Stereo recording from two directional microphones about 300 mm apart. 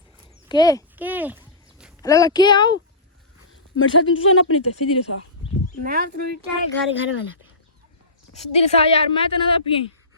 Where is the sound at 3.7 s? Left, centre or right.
Left.